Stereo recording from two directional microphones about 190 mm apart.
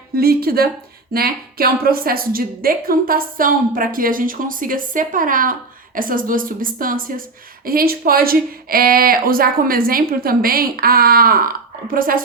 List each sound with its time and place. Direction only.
0.2 s a woman's voice: 55° right (ahead or behind)